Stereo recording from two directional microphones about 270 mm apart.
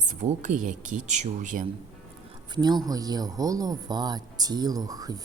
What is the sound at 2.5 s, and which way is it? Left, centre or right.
Speech, centre.